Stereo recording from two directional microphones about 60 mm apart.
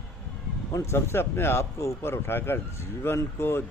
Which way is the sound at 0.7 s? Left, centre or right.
Left.